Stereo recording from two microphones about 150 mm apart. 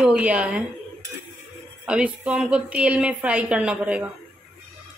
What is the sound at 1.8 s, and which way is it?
A woman's voice, 10° right (ahead or behind).